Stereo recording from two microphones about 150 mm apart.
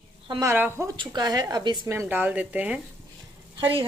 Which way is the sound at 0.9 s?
30° right (ahead or behind).